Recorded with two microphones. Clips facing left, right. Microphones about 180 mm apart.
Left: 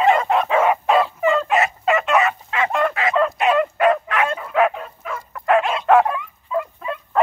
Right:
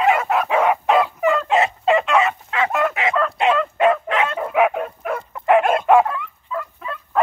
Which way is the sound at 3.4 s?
25° right (ahead or behind).